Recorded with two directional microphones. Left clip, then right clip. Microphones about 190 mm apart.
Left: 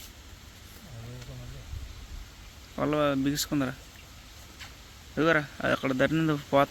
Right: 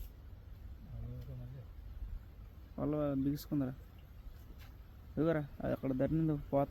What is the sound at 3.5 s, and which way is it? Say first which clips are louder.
Speech: left 8 dB; 10° left (ahead or behind).